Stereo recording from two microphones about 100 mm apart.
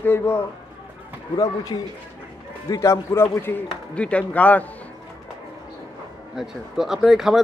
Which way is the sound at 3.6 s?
10° left (ahead or behind).